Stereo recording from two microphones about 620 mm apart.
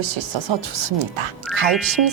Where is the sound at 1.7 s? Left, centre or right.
Centre.